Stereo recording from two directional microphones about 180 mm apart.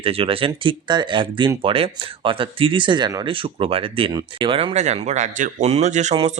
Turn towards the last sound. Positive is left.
turn(degrees=-35)  # may be behind; listen again after turning